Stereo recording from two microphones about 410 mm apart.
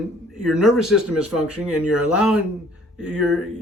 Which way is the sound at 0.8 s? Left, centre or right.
Centre.